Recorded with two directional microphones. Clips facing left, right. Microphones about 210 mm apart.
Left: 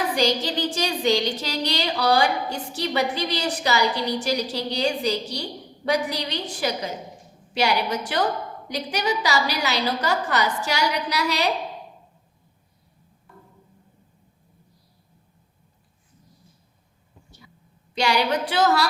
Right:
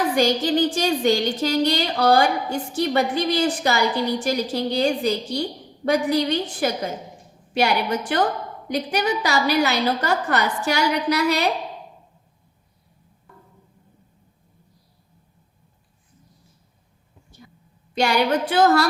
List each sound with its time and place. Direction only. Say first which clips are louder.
0.2 s a woman's voice: right 5 dB; 50° right (ahead or behind)
17.9 s a woman's voice: right 3 dB; 50° right (ahead or behind)